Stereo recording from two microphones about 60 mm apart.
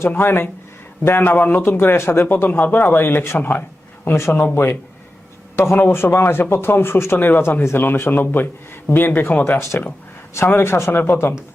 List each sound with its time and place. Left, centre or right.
0.2 s a man's voice: left
4.0 s a man's voice: left
9.6 s speech: left